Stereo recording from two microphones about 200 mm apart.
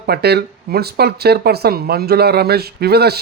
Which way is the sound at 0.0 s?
55° right (ahead or behind).